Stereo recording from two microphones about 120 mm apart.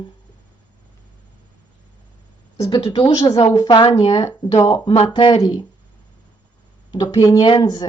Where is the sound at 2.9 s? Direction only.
50° left (ahead or behind).